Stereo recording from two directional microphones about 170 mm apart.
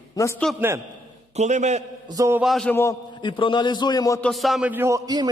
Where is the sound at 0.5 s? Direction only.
15° right (ahead or behind).